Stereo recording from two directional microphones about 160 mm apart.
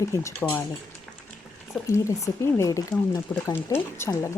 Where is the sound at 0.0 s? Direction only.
20° left (ahead or behind).